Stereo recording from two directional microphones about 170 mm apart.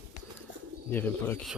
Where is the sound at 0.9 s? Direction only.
10° left (ahead or behind).